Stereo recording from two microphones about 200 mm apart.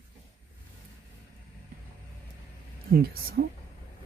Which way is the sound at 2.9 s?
50° right (ahead or behind).